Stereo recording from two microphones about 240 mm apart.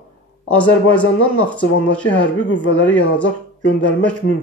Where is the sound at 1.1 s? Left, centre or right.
Left.